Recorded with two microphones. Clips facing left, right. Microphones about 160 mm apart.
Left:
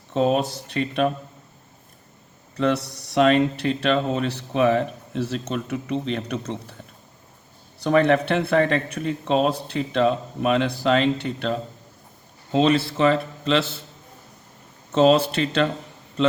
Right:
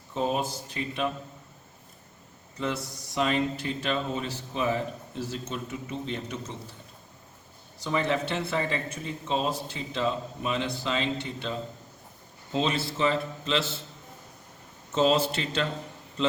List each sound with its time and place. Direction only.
0.1 s speech: 70° left (ahead or behind)
2.6 s speech: 70° left (ahead or behind)
7.8 s a man's voice: 65° left (ahead or behind)
14.9 s speech: 65° left (ahead or behind)